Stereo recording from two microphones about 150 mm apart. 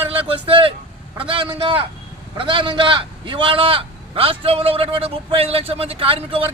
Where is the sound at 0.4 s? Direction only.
35° right (ahead or behind).